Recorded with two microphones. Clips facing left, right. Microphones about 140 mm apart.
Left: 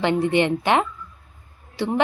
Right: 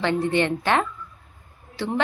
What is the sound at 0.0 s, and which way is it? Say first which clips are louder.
A woman's voice: left 2 dB; 15° left (ahead or behind).